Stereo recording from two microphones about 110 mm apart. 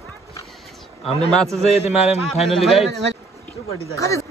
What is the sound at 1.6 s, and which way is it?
Speech, 70° left (ahead or behind).